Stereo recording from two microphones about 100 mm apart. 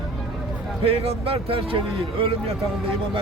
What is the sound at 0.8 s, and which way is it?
Speech, 80° right.